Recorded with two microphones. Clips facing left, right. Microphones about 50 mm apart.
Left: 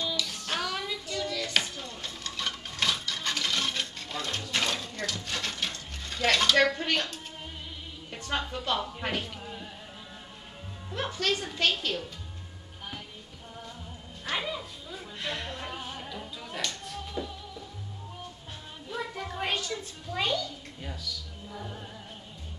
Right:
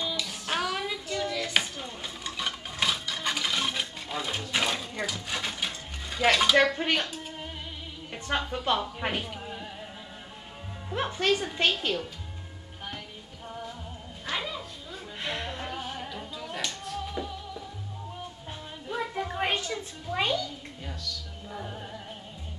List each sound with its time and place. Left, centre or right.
0.0 s child singing: centre
8.1 s speech: centre
10.9 s a woman's voice: right
14.2 s music: centre
15.1 s a sound: centre
15.6 s music: centre
17.2 s music: right
18.9 s music: right
21.5 s music: centre